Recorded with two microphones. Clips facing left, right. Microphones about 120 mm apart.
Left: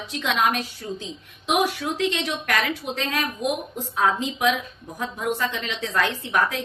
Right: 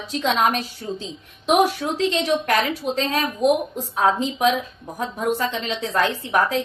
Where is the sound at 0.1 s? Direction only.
35° right (ahead or behind).